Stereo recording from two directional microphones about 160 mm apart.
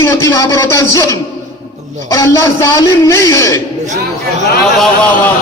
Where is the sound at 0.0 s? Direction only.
20° left (ahead or behind).